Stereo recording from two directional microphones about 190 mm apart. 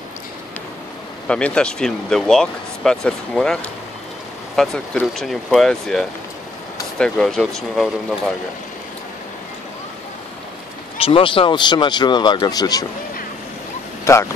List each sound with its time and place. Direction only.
1.2 s speech: 5° left (ahead or behind)
4.6 s speech: 5° left (ahead or behind)
11.0 s speech: 30° left (ahead or behind)
14.1 s speech: 15° left (ahead or behind)